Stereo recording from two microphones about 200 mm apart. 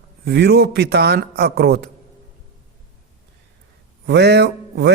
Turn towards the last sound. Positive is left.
turn(degrees=-55)  # may be behind; listen again after turning